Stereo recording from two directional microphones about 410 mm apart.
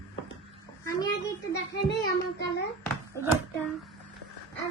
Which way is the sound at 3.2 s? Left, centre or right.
Centre.